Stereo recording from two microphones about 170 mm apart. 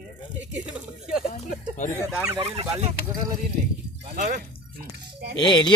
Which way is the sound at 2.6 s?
40° right (ahead or behind).